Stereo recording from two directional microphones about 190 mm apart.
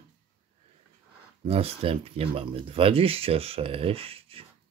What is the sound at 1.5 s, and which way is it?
Speech, 30° right (ahead or behind).